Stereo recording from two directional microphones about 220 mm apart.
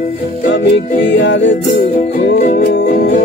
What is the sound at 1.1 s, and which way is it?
Music, 55° left (ahead or behind).